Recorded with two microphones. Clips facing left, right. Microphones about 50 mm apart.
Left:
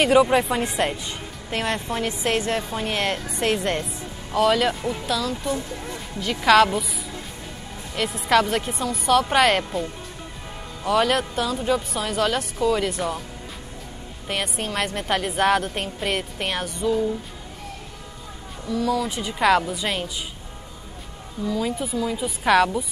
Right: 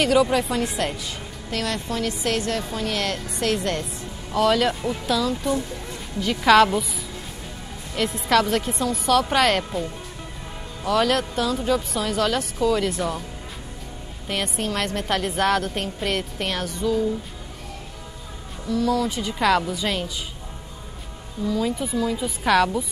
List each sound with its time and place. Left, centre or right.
0.0 s a woman's voice: left
4.3 s a woman's voice: centre
7.9 s a woman's voice: centre
14.2 s a woman's voice: centre
18.7 s a woman's voice: centre
21.5 s a woman's voice: centre